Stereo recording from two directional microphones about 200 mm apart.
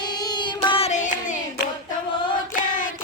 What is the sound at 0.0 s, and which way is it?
Child singing, 20° left (ahead or behind).